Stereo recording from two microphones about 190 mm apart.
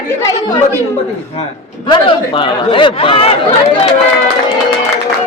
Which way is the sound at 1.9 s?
25° left (ahead or behind).